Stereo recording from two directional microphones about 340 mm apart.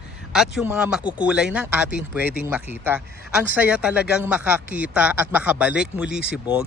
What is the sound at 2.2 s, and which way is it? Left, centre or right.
Speech, left.